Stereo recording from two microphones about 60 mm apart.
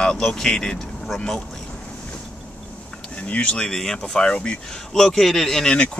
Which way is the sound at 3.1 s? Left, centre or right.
Left.